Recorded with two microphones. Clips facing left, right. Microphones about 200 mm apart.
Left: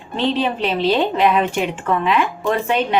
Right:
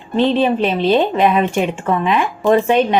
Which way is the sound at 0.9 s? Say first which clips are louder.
Right 2 dB; 15° right (ahead or behind).